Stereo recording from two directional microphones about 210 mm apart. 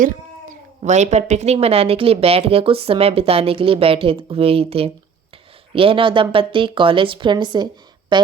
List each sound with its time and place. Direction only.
0.0 s a woman's voice: 35° right (ahead or behind)